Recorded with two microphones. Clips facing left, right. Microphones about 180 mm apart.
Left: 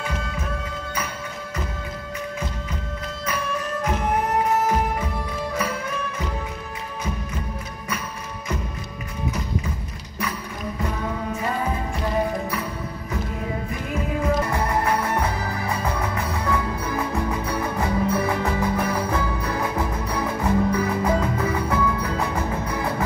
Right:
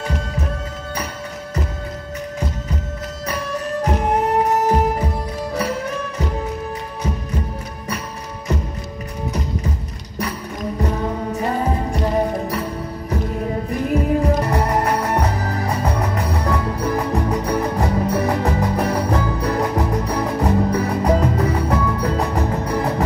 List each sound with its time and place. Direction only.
3.3 s music: 35° right (ahead or behind)
10.8 s music: 35° right (ahead or behind)
13.9 s music: 40° right (ahead or behind)